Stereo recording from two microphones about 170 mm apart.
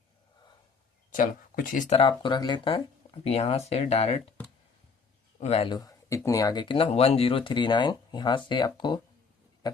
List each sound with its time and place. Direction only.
1.1 s speech: 55° left (ahead or behind)
2.0 s speech: 30° left (ahead or behind)
5.4 s speech: 35° left (ahead or behind)
5.7 s speech: 20° left (ahead or behind)